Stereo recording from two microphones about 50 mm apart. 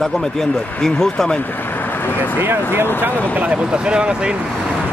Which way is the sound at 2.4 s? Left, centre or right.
Right.